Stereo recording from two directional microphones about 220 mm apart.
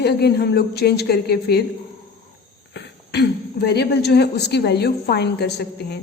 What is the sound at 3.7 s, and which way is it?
Speech, 45° left (ahead or behind).